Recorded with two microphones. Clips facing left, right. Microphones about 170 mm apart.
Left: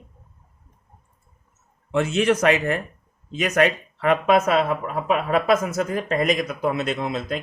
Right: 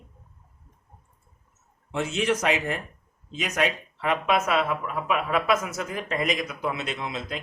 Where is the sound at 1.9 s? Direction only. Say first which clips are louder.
Left 6 dB; 60° left (ahead or behind).